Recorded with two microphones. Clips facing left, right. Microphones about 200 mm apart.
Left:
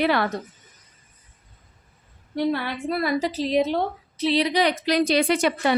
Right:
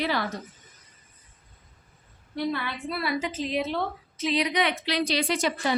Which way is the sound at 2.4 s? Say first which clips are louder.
Left 5 dB; 45° left (ahead or behind).